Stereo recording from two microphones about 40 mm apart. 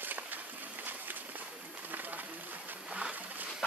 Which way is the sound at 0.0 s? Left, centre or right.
Right.